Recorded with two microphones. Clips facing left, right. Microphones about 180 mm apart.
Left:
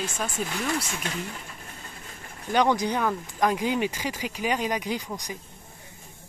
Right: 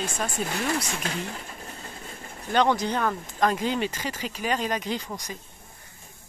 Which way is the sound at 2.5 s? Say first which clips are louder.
Even; 15° left (ahead or behind).